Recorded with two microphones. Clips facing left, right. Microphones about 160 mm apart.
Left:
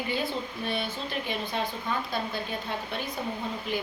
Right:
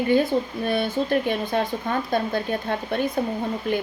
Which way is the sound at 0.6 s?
50° right (ahead or behind).